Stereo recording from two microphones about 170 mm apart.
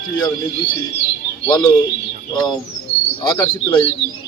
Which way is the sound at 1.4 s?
25° left (ahead or behind).